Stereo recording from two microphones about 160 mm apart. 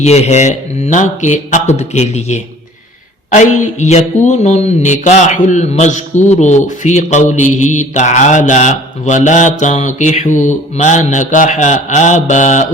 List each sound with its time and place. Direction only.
0.0 s speech: 45° left (ahead or behind)